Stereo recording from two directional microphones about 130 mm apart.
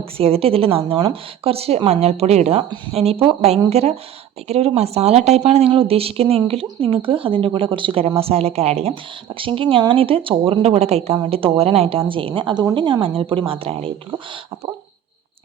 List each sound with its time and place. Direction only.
0.2 s speech: 50° right (ahead or behind)